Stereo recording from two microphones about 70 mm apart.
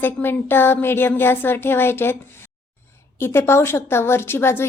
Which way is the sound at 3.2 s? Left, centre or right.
Left.